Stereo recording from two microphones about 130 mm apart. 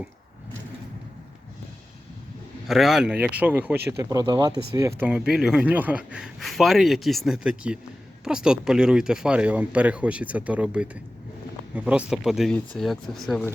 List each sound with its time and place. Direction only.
2.6 s speech: centre (ahead or behind); by 5.0 s 25° right (ahead or behind)
5.0 s a man's voice: 5° right (ahead or behind)